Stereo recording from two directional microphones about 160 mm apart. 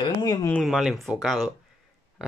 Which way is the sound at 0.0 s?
25° left (ahead or behind).